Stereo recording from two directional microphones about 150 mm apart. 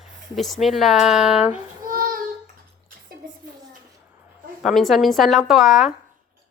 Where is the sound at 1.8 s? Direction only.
70° right (ahead or behind).